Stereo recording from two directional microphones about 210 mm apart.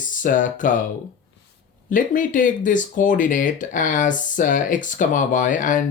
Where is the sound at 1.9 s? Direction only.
40° left (ahead or behind).